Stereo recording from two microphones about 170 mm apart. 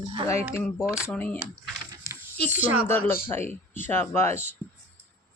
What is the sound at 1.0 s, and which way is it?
Speech, 10° left (ahead or behind).